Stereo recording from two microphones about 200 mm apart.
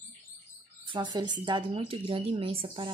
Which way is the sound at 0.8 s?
20° right (ahead or behind).